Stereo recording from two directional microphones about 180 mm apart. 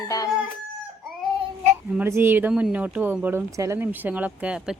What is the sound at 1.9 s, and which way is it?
Speech, 10° right (ahead or behind).